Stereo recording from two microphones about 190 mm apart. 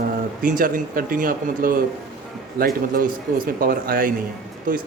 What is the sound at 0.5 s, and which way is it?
Speech, 45° right (ahead or behind).